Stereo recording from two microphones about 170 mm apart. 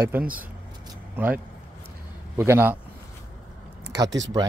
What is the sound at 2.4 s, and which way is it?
Speech, 15° right (ahead or behind).